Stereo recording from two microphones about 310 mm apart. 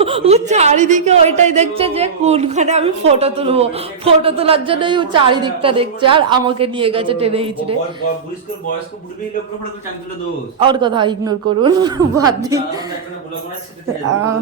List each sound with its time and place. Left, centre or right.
0.0 s a woman's voice: centre
10.6 s a woman's voice: centre